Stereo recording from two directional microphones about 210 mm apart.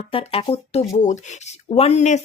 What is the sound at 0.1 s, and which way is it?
Speech, 25° left (ahead or behind).